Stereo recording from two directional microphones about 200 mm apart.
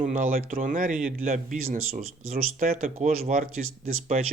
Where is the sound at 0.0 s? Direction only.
40° right (ahead or behind).